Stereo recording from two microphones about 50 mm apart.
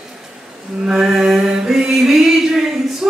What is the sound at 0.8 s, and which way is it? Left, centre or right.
Mantra, centre.